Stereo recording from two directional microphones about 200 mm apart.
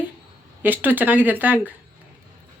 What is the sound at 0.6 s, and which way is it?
Speech, 10° right (ahead or behind).